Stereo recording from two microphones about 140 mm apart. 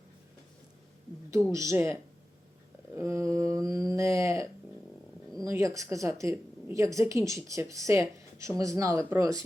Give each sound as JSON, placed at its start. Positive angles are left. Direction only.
{"t": 1.5, "sound": "a woman's voice", "side_deg": -20}
{"t": 2.9, "sound": "a sound", "side_deg": -20}
{"t": 5.4, "sound": "a woman's voice", "side_deg": -20}